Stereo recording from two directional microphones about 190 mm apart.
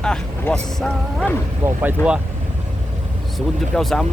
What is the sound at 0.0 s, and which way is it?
Speech, 5° left (ahead or behind).